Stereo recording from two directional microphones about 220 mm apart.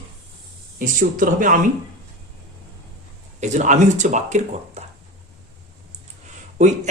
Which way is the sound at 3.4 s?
35° right (ahead or behind).